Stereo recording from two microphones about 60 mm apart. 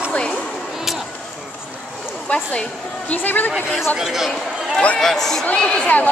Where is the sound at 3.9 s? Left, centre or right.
Centre.